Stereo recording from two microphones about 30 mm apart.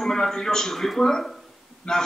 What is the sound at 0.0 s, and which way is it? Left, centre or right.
A man's voice, centre.